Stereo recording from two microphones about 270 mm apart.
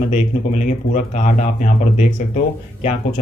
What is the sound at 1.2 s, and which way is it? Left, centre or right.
Speech, left.